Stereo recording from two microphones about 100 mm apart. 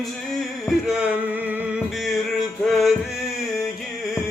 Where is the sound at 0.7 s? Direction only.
5° right (ahead or behind).